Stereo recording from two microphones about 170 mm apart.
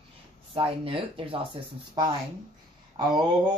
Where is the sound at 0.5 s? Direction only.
35° right (ahead or behind).